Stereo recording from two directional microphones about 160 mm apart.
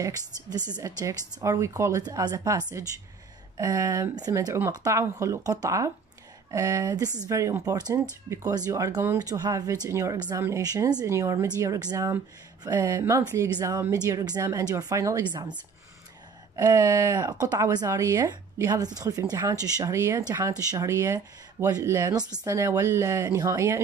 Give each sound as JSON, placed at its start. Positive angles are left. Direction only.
{"t": 0.7, "sound": "speech", "side_deg": -20}
{"t": 16.5, "sound": "speech", "side_deg": -20}